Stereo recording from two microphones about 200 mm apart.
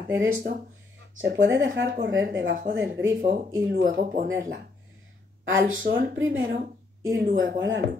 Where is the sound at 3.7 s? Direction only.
50° right (ahead or behind).